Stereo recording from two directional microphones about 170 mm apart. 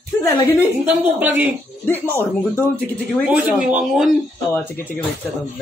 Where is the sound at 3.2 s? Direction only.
10° right (ahead or behind).